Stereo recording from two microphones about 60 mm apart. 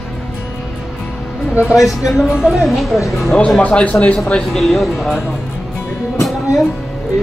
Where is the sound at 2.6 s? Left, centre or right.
Centre.